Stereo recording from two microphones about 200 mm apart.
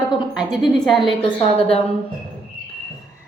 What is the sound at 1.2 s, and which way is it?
Speech, 30° left (ahead or behind).